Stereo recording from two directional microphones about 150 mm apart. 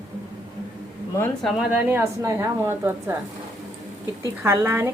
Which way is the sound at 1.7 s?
15° right (ahead or behind).